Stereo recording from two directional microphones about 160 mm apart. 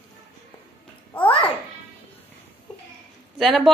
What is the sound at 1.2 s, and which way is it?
Babbling, 35° left (ahead or behind).